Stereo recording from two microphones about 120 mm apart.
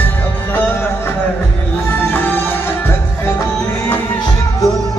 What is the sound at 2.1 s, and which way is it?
Music, 20° left (ahead or behind).